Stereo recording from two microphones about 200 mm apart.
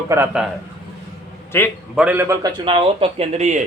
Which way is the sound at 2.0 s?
10° right (ahead or behind).